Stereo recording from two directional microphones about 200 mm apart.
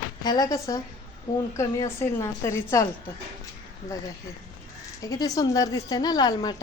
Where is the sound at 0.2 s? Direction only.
20° left (ahead or behind).